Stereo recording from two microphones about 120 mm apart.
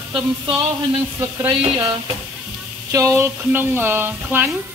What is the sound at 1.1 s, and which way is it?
Speech, 25° right (ahead or behind).